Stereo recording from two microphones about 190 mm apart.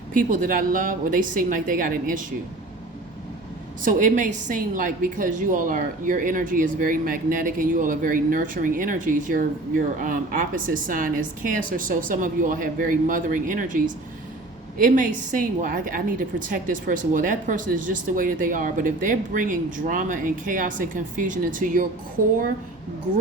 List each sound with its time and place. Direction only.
0.1 s a woman's voice: 45° right (ahead or behind)
3.8 s a woman's voice: 40° right (ahead or behind)